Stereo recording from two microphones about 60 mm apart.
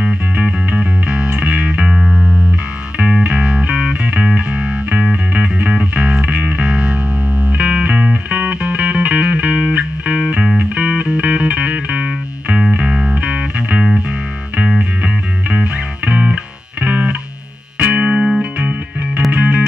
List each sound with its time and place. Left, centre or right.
0.4 s music: right
2.0 s music: centre
3.3 s music: centre
15.5 s music: right
18.4 s music: right